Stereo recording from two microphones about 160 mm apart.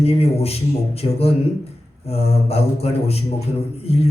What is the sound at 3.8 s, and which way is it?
Music, 40° left (ahead or behind).